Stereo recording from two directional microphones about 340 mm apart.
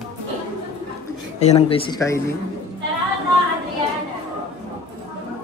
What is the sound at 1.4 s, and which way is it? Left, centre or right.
Speech, centre.